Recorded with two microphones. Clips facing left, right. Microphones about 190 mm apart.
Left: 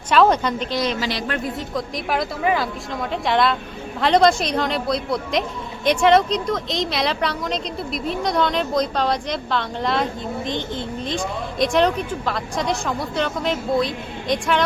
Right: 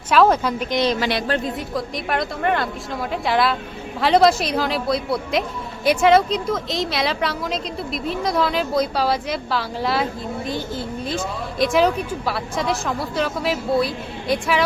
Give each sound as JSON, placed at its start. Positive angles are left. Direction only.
{"t": 0.1, "sound": "a woman's voice", "side_deg": -5}
{"t": 0.9, "sound": "a woman's voice", "side_deg": -60}
{"t": 1.7, "sound": "a woman's voice", "side_deg": 0}